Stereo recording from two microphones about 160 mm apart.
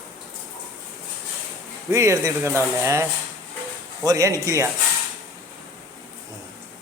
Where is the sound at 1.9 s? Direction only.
20° right (ahead or behind).